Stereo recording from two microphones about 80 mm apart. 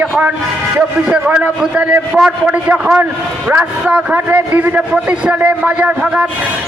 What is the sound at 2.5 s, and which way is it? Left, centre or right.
A man's voice, centre.